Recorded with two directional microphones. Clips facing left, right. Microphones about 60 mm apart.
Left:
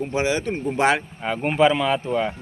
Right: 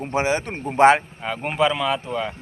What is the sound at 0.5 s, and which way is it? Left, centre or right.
Speech, centre.